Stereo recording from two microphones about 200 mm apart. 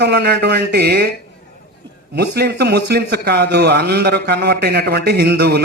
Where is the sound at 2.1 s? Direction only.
55° right (ahead or behind).